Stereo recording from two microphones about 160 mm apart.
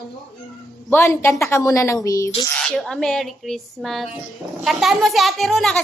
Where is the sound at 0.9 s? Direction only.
15° left (ahead or behind).